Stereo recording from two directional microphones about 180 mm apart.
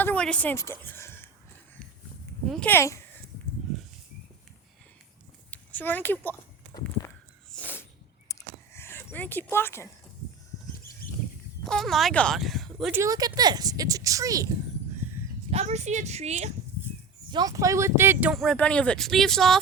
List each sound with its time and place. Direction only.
0.0 s a woman's voice: 5° left (ahead or behind)
2.5 s a child's voice: 10° left (ahead or behind)
5.5 s speech: 10° left (ahead or behind)
7.5 s a sound: 10° left (ahead or behind)
10.7 s a sound: 50° left (ahead or behind)
11.6 s speech: centre (ahead or behind)
12.9 s speech: 20° right (ahead or behind)
15.4 s a woman's voice: 35° right (ahead or behind)
17.3 s speech: 20° right (ahead or behind)
18.3 s speech: 5° left (ahead or behind)